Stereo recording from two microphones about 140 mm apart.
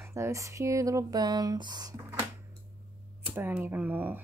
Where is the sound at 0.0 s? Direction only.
20° right (ahead or behind).